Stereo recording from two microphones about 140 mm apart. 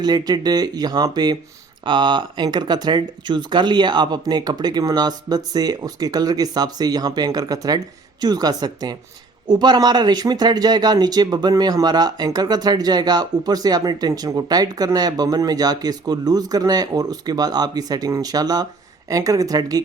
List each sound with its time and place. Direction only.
0.0 s speech: 30° right (ahead or behind)